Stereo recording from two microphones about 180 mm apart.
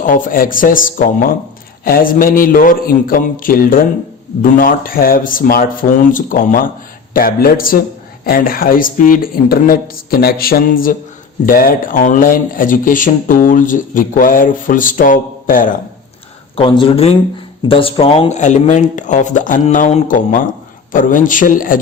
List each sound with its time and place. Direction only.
0.0 s speech: 50° left (ahead or behind)
16.6 s speech: 30° left (ahead or behind); by 21.8 s 50° left (ahead or behind)